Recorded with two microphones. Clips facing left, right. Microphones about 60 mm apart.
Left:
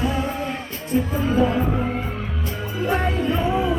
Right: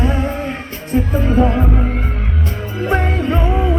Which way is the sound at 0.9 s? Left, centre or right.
Right.